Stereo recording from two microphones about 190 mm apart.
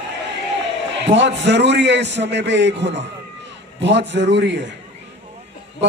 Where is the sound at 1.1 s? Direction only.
70° right (ahead or behind).